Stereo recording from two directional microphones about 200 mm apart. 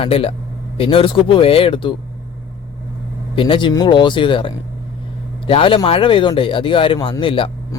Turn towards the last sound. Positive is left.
turn(degrees=25)  # may be behind; listen again after turning